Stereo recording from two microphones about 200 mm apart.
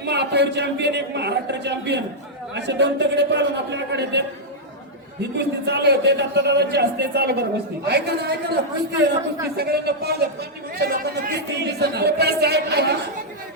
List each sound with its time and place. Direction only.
0.0 s speech: 55° right (ahead or behind)
5.2 s a man's voice: 55° right (ahead or behind)